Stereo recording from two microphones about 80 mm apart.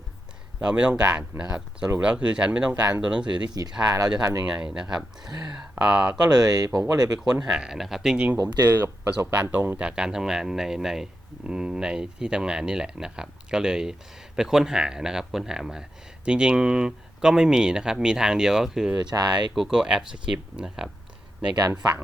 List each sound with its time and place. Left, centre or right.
0.6 s speech: centre
3.6 s speech: right
4.4 s speech: centre
6.3 s speech: right
7.5 s speech: centre
8.7 s speech: right; by 18.9 s centre
19.0 s speech: right
19.5 s speech: centre